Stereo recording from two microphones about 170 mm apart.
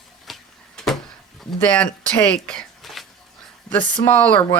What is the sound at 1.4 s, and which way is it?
Speech, 5° left (ahead or behind).